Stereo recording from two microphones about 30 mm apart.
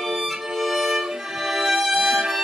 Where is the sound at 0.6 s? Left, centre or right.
Centre.